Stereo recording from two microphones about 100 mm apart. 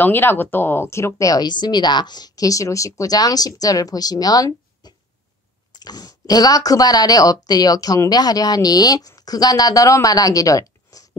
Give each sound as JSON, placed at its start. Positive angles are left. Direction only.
{"t": 0.0, "sound": "a woman's voice", "side_deg": 20}